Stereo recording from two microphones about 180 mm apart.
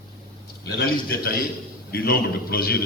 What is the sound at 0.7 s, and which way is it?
A man's voice, 55° left (ahead or behind).